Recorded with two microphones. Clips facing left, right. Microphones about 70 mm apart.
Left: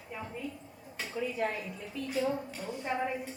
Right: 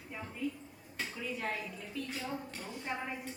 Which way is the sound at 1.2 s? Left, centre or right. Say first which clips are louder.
Left 6 dB; centre.